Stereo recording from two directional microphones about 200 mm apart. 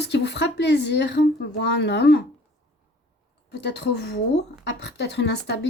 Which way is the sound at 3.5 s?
55° left (ahead or behind).